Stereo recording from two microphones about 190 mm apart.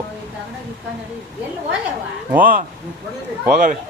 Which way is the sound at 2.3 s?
45° right (ahead or behind).